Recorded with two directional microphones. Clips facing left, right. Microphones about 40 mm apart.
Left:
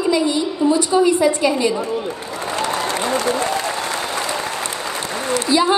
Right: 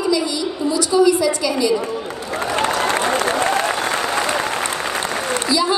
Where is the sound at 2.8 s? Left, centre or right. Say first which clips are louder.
Right 2 dB; right.